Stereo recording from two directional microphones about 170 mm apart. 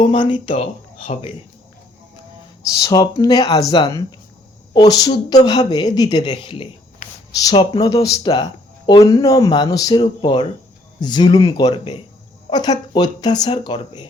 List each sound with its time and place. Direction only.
0.0 s speech: 30° left (ahead or behind)
2.8 s speech: 25° left (ahead or behind)
12.5 s speech: 25° left (ahead or behind)